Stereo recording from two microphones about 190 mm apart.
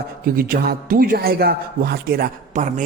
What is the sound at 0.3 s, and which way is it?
A man's voice, 50° right (ahead or behind).